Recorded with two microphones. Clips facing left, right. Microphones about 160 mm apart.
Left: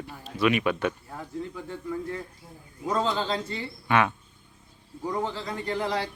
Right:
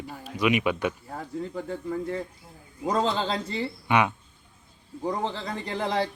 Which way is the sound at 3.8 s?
15° right (ahead or behind).